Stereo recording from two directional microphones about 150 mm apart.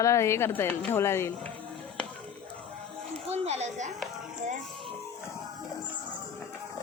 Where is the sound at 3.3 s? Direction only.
45° right (ahead or behind).